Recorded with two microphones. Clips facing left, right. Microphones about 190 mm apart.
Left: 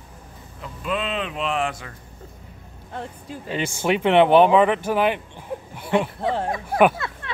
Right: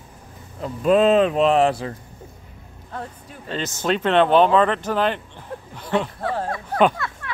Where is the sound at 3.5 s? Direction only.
15° left (ahead or behind).